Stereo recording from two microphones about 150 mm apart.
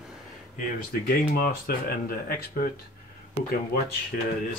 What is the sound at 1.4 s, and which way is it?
Speech, 85° left.